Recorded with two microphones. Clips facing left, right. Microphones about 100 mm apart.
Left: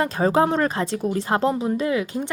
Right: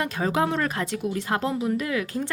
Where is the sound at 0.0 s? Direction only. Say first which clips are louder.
Left 5 dB; 35° left (ahead or behind).